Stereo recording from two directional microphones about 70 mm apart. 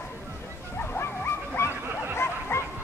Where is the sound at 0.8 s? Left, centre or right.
Left.